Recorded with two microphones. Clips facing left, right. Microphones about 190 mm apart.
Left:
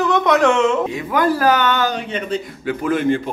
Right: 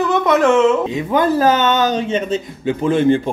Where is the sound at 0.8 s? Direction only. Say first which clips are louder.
Right 2 dB; 20° right (ahead or behind).